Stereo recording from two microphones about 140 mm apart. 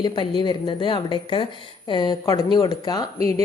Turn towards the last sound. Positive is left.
turn(degrees=-50)  # may be behind; listen again after turning